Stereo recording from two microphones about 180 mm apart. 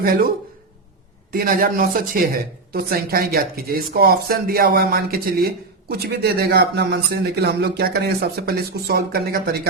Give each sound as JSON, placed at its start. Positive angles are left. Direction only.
{"t": 0.0, "sound": "speech", "side_deg": -55}
{"t": 1.3, "sound": "speech", "side_deg": -55}